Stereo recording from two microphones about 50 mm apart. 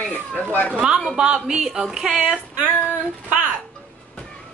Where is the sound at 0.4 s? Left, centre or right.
Left.